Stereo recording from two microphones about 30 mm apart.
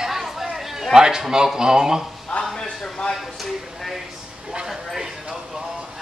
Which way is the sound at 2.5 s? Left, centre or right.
Left.